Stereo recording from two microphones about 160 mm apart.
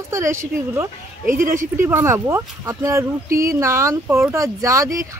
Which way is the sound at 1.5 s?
15° right (ahead or behind).